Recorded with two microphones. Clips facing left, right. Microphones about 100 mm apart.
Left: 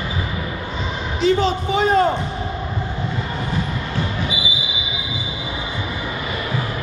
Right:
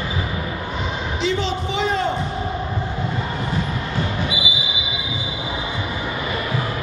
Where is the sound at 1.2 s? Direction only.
45° left (ahead or behind).